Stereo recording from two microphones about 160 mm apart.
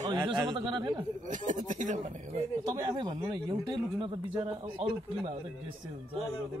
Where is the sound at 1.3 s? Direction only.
50° right (ahead or behind).